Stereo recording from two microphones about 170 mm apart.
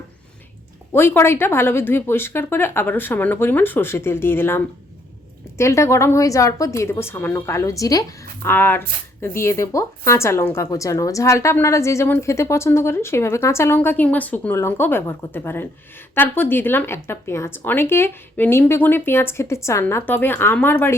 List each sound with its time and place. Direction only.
0.9 s a woman's voice: 15° left (ahead or behind)